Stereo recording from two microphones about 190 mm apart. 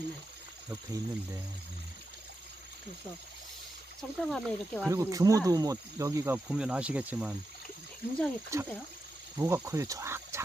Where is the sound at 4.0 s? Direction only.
Centre (ahead or behind).